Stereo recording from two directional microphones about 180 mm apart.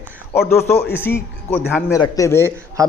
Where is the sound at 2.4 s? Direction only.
15° right (ahead or behind).